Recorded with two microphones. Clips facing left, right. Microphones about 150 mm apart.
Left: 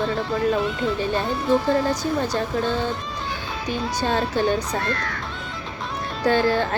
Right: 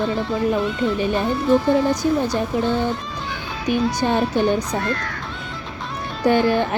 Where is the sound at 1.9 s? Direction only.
15° right (ahead or behind).